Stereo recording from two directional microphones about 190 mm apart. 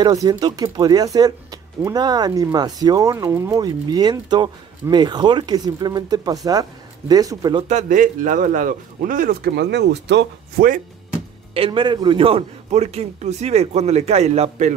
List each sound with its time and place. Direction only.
0.0 s speech: 20° right (ahead or behind)
7.6 s speech: 40° right (ahead or behind); by 10.7 s 65° right (ahead or behind)
11.5 s a man's voice: 30° right (ahead or behind)